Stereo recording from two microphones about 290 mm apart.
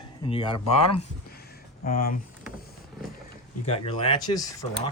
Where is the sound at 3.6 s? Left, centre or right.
Centre.